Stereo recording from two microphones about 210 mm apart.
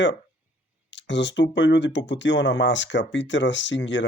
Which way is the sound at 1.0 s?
60° left (ahead or behind).